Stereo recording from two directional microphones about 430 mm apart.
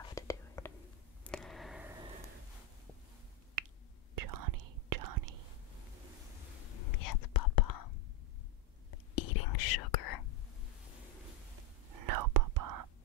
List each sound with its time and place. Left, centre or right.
0.1 s whispering: centre
1.2 s a sound: centre
3.6 s finger snapping: right
4.1 s whispering: right
6.9 s whispering: left
9.1 s whispering: left
12.1 s whispering: right